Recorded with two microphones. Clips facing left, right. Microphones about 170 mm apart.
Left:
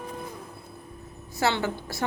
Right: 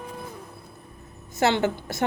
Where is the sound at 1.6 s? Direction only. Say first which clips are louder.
Right 5 dB; 20° right (ahead or behind).